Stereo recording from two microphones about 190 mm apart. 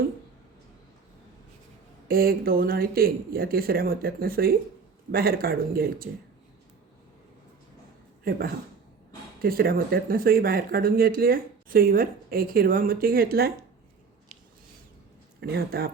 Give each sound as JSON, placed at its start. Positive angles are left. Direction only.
{"t": 2.0, "sound": "speech", "side_deg": -50}
{"t": 8.2, "sound": "speech", "side_deg": -50}
{"t": 15.4, "sound": "speech", "side_deg": -55}